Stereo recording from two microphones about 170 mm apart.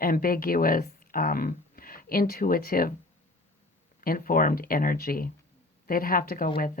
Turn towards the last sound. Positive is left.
turn(degrees=55)  # may be behind; listen again after turning